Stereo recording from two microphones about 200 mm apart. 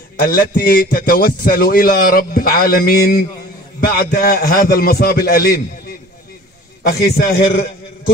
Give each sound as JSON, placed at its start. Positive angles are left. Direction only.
{"t": 0.2, "sound": "a man's voice", "side_deg": 45}